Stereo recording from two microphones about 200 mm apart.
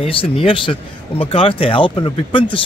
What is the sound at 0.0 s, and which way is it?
Speech, 25° left (ahead or behind).